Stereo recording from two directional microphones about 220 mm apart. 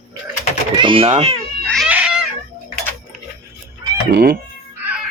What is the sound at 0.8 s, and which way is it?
Speech, 25° right (ahead or behind).